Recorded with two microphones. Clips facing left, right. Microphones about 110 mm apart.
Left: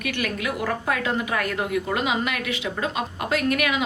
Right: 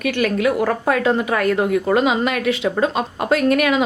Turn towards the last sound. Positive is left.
turn(degrees=-35)  # may be behind; listen again after turning